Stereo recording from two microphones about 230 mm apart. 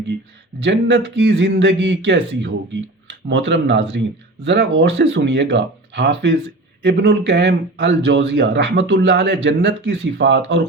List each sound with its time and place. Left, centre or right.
0.6 s speech: right